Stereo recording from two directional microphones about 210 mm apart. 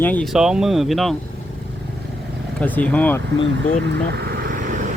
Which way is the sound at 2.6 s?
5° left (ahead or behind).